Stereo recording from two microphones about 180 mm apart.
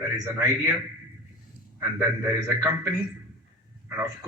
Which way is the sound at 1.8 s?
15° right (ahead or behind).